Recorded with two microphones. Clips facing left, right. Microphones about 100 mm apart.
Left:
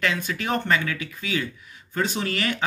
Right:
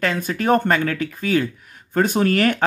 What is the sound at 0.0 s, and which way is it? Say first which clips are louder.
Speech: right 5 dB; 45° right (ahead or behind).